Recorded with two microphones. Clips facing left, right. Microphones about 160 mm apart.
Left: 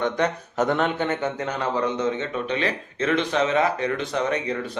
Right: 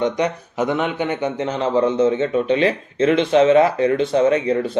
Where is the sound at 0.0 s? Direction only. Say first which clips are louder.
Right 4 dB; 10° right (ahead or behind).